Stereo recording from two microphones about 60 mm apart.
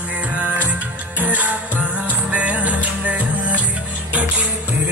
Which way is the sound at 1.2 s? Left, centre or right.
Right.